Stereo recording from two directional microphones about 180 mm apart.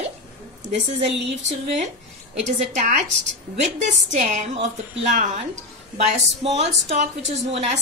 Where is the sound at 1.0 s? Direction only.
40° right (ahead or behind).